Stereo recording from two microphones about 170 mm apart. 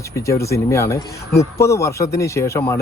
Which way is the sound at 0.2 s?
15° left (ahead or behind).